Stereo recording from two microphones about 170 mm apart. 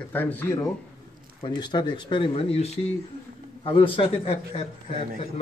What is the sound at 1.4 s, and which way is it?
A man's voice, 25° left (ahead or behind).